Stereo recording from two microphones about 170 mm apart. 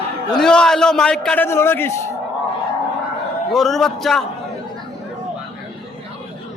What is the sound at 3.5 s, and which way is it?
Speech, centre (ahead or behind).